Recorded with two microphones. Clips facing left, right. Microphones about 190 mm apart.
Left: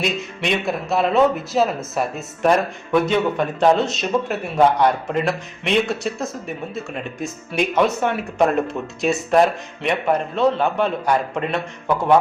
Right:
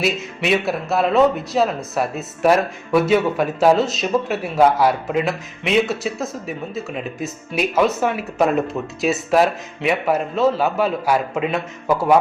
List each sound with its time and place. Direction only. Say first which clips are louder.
0.0 s speech: right 2 dB; 5° right (ahead or behind)